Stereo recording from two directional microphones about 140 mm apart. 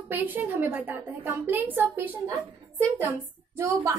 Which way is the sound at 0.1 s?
15° right (ahead or behind).